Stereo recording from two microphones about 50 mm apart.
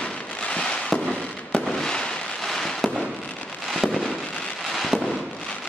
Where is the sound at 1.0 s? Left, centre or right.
Centre.